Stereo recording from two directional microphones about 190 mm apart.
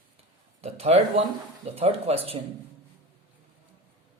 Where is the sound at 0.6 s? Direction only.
35° right (ahead or behind).